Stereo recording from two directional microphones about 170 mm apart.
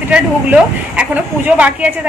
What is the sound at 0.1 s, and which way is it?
A woman's voice, 10° right (ahead or behind).